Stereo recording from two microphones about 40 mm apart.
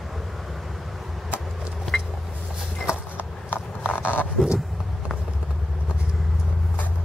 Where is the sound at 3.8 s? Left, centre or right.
Left.